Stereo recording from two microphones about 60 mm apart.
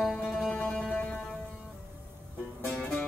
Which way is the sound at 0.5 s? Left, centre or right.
Left.